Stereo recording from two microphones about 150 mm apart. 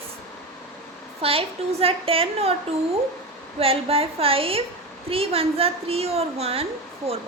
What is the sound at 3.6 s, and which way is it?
A woman's voice, 40° right (ahead or behind).